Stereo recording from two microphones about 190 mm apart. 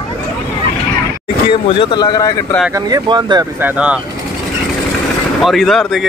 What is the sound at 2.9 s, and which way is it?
Speech, 20° right (ahead or behind).